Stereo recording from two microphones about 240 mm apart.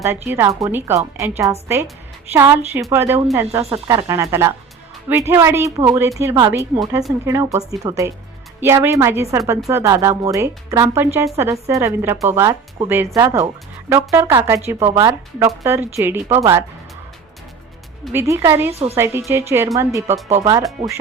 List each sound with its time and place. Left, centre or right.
0.0 s speech: centre
18.0 s speech: centre
18.7 s a woman's voice: right
18.9 s speech: centre